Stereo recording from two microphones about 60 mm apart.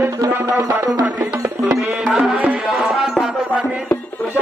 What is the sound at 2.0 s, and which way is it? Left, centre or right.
Music, centre.